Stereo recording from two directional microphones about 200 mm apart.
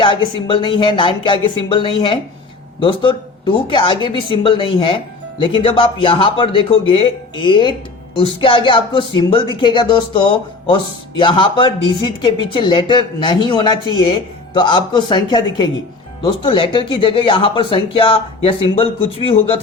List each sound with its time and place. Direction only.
0.0 s speech: 25° left (ahead or behind)